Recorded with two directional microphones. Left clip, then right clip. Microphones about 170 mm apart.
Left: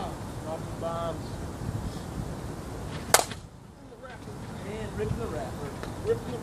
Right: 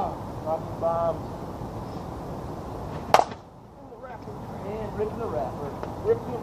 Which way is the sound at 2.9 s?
30° left (ahead or behind).